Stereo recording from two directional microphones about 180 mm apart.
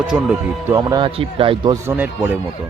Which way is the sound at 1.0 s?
30° right (ahead or behind).